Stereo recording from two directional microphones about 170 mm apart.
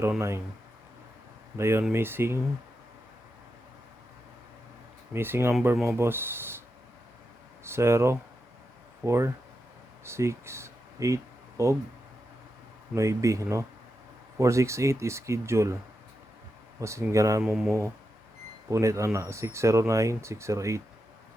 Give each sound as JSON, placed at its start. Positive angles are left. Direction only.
{"t": 0.0, "sound": "speech", "side_deg": -15}
{"t": 1.5, "sound": "speech", "side_deg": -15}
{"t": 5.1, "sound": "speech", "side_deg": -15}
{"t": 5.7, "sound": "speech", "side_deg": 0}
{"t": 6.0, "sound": "speech", "side_deg": -15}
{"t": 7.6, "sound": "speech", "side_deg": -15}
{"t": 12.9, "sound": "speech", "side_deg": -20}
{"t": 16.8, "sound": "speech", "side_deg": -15}
{"t": 17.4, "sound": "speech", "side_deg": -5}
{"t": 17.7, "sound": "speech", "side_deg": -15}